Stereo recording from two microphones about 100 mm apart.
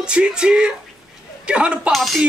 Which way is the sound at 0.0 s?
10° right (ahead or behind).